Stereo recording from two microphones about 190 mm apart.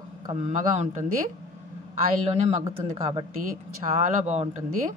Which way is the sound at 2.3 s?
35° right (ahead or behind).